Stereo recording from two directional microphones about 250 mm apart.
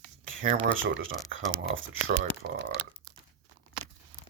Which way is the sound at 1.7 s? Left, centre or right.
Right.